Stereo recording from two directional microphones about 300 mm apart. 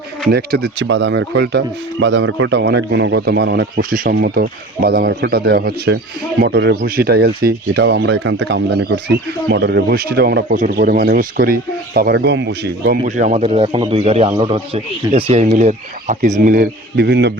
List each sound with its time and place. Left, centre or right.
0.3 s speech: right